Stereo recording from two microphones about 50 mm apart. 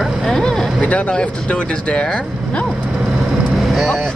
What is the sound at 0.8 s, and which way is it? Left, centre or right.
Speech, left.